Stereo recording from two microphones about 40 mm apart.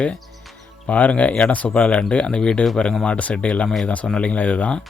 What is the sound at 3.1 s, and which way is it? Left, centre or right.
Speech, left.